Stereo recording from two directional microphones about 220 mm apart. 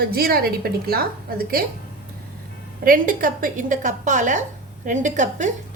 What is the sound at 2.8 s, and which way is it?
A woman's voice, 40° right (ahead or behind).